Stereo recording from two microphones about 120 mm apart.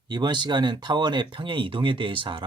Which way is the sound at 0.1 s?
35° right (ahead or behind).